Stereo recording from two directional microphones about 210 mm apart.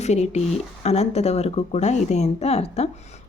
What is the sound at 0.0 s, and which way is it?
Speech, 30° left (ahead or behind).